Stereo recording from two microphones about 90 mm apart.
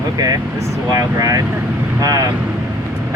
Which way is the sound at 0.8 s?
45° right (ahead or behind).